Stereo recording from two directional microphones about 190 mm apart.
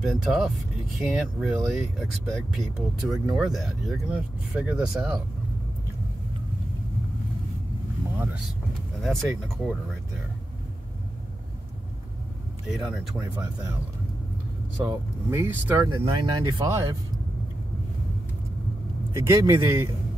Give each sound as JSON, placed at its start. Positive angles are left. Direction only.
{"t": 0.0, "sound": "speech", "side_deg": 0}
{"t": 9.0, "sound": "speech", "side_deg": 0}
{"t": 12.6, "sound": "speech", "side_deg": 0}
{"t": 14.9, "sound": "speech", "side_deg": -10}
{"t": 19.1, "sound": "speech", "side_deg": -15}